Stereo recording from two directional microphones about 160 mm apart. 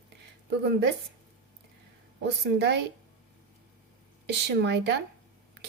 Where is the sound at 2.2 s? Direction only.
90° right.